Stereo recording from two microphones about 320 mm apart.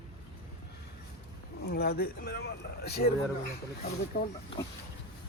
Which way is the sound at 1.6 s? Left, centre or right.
Left.